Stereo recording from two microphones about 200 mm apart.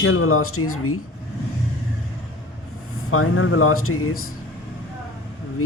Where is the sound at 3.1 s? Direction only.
90° left.